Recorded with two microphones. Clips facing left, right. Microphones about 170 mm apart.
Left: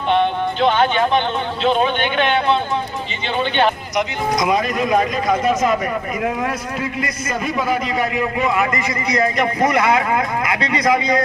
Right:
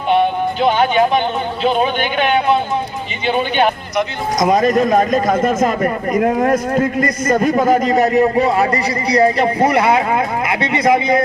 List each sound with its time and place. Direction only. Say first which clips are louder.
0.1 s music: right 3 dB; 10° right (ahead or behind)
1.6 s a man's voice: right 1 dB; 10° right (ahead or behind)
4.4 s speech: right 7 dB; 45° right (ahead or behind); by 11.2 s 25° right (ahead or behind)